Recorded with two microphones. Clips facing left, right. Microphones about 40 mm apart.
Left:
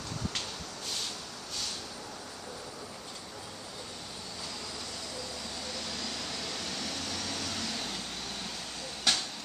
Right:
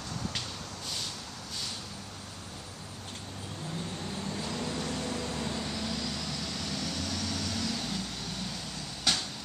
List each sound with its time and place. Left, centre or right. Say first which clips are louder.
4.5 s vehicle: right 7 dB; right
5.9 s vehicle: right 3 dB; centre
9.1 s a sound: even; centre